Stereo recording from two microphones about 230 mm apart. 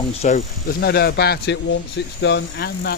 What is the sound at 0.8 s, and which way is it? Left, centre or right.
Speech, left.